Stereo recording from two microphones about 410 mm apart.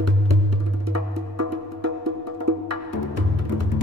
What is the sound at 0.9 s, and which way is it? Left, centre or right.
Music, right.